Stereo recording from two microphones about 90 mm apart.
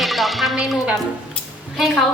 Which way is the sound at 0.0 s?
Centre (ahead or behind).